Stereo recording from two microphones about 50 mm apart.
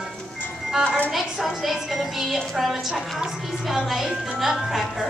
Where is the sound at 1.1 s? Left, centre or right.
Centre.